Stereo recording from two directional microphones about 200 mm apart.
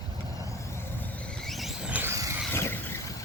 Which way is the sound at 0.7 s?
5° left (ahead or behind).